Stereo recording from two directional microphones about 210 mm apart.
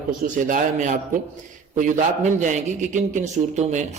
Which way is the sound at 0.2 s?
40° right (ahead or behind).